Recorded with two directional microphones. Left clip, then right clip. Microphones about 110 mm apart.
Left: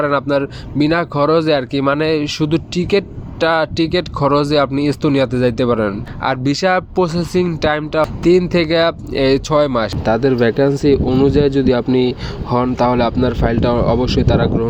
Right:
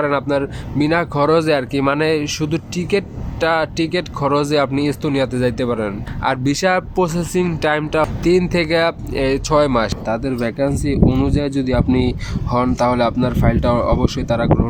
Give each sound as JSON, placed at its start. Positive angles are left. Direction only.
{"t": 0.0, "sound": "speech", "side_deg": 40}
{"t": 3.4, "sound": "speech", "side_deg": 50}